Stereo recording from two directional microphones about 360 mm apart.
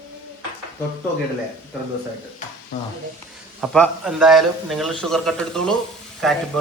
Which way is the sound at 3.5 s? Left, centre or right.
Centre.